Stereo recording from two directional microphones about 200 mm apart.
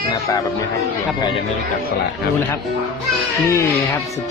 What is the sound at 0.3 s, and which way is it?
Speech, 20° left (ahead or behind).